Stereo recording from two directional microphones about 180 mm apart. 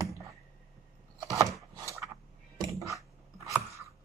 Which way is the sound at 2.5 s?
20° right (ahead or behind).